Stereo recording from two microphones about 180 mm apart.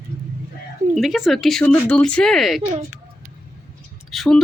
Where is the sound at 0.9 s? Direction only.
Centre (ahead or behind).